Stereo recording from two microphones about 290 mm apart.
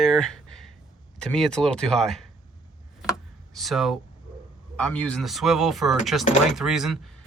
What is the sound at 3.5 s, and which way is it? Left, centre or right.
Speech, centre.